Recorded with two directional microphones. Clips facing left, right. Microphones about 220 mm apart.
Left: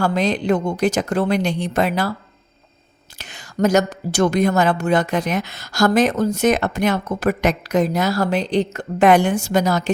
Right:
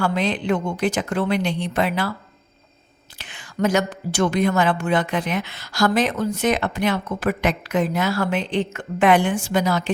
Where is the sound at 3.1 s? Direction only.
40° left (ahead or behind).